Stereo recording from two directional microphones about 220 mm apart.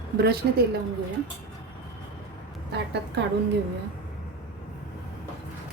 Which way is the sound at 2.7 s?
50° right (ahead or behind).